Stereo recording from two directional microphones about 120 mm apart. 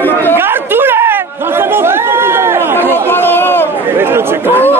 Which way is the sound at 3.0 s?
15° left (ahead or behind).